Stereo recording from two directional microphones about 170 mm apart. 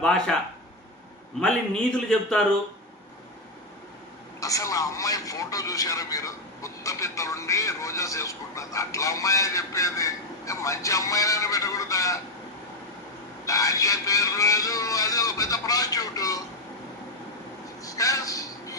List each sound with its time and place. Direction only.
0.0 s speech: 5° left (ahead or behind)
2.4 s speech: 5° left (ahead or behind)
4.4 s a man's voice: 20° left (ahead or behind)
13.4 s a man's voice: 20° left (ahead or behind)
17.8 s a sound: 20° left (ahead or behind)